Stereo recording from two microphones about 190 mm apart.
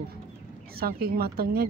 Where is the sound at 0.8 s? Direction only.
55° right (ahead or behind).